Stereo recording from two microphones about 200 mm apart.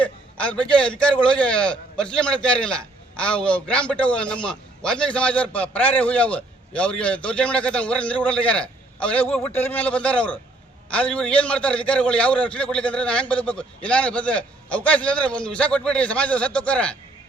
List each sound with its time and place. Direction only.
0.0 s a man's voice: 5° left (ahead or behind)